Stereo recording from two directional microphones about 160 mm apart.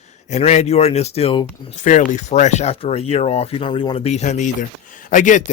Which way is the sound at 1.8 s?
50° left (ahead or behind).